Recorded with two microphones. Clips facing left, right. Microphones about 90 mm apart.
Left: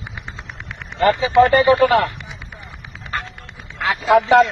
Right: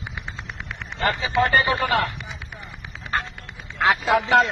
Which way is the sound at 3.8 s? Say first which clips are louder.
Right 2 dB; 20° right (ahead or behind).